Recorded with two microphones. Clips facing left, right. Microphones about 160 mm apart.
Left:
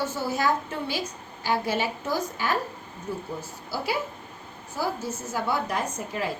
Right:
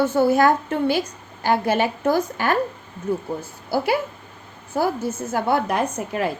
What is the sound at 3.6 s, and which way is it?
Speech, 55° right (ahead or behind).